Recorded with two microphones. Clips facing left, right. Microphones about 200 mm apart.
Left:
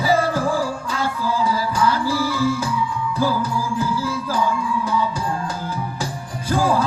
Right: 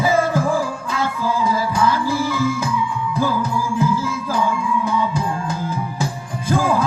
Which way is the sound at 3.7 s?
35° left (ahead or behind).